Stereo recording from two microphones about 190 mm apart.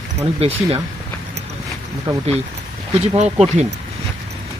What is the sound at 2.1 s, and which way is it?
Speech, 25° right (ahead or behind).